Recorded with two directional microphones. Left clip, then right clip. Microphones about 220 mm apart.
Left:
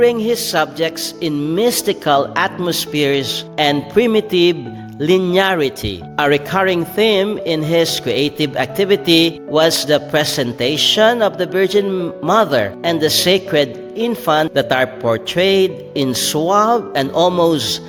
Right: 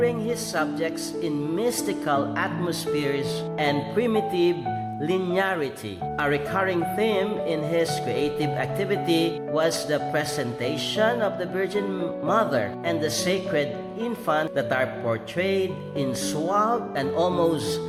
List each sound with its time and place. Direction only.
0.0 s speech: 40° left (ahead or behind)